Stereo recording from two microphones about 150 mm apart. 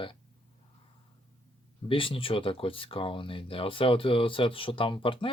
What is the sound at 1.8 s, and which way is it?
Speech, 35° left (ahead or behind).